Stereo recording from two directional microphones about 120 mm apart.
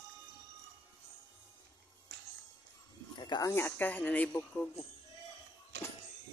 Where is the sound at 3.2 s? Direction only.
35° left (ahead or behind).